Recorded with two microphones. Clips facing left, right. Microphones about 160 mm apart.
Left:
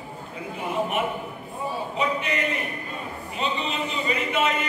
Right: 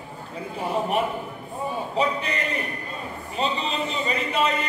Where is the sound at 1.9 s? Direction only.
35° right (ahead or behind).